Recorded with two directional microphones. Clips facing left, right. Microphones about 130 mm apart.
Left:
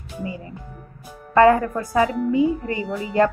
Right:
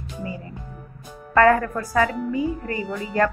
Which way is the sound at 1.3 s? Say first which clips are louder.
Left 2 dB; 20° left (ahead or behind).